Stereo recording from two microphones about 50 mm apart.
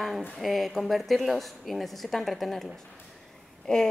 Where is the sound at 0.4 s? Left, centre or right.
Centre.